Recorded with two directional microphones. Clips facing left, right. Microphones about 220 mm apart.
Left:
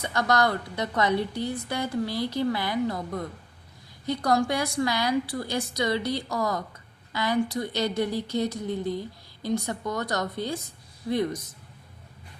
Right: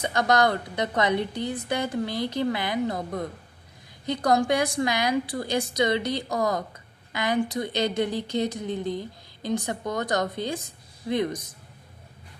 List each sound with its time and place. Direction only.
0.0 s a woman's voice: 20° right (ahead or behind)
4.0 s a woman's voice: 20° right (ahead or behind)